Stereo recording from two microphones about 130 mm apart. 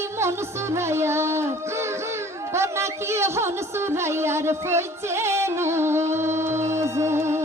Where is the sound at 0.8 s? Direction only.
20° right (ahead or behind).